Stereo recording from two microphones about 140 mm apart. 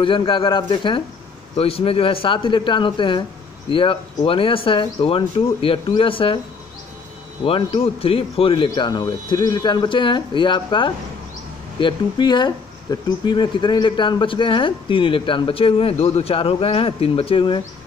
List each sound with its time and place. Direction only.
0.0 s speech: 40° left (ahead or behind)
7.4 s speech: 40° left (ahead or behind)
8.6 s speech: 30° left (ahead or behind)